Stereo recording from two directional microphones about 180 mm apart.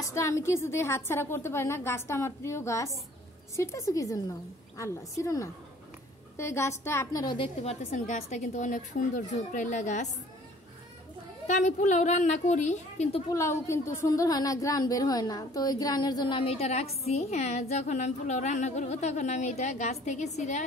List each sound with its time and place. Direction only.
0.1 s a woman's voice: 15° left (ahead or behind)
7.6 s a woman's voice: 45° left (ahead or behind)
11.4 s a woman's voice: 40° left (ahead or behind)
13.3 s a woman's voice: 15° left (ahead or behind); by 20.6 s 40° left (ahead or behind)